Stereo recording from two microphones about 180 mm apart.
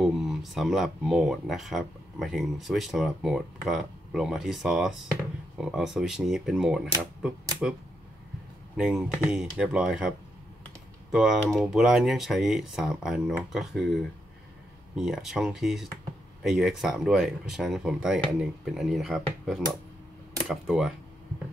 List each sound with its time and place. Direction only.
0.0 s speech: centre (ahead or behind)
8.7 s speech: 5° right (ahead or behind)
15.0 s speech: centre (ahead or behind)